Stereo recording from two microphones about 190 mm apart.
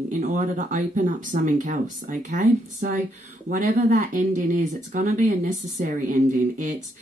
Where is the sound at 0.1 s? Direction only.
40° right (ahead or behind).